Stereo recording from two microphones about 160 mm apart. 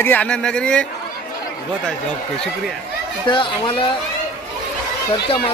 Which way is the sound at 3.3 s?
30° left (ahead or behind).